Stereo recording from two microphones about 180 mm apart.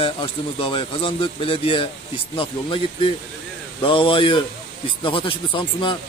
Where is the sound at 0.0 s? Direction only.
30° left (ahead or behind).